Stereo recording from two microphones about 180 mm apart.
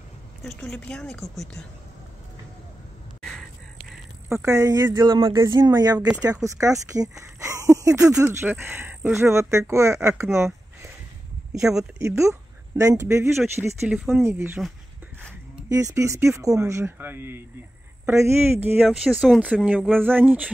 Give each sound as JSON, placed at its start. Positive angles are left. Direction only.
{"t": 0.4, "sound": "a woman's voice", "side_deg": 5}
{"t": 3.2, "sound": "a sound", "side_deg": 0}
{"t": 4.3, "sound": "speech", "side_deg": -15}
{"t": 10.3, "sound": "a sound", "side_deg": -15}
{"t": 12.0, "sound": "speech", "side_deg": -15}
{"t": 15.7, "sound": "speech", "side_deg": -15}
{"t": 18.9, "sound": "a woman's voice", "side_deg": -5}